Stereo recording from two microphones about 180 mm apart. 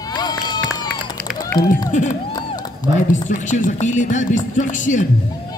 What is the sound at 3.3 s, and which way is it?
Music, 45° left (ahead or behind).